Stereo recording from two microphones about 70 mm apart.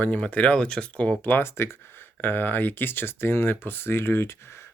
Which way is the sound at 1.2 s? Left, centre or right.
Left.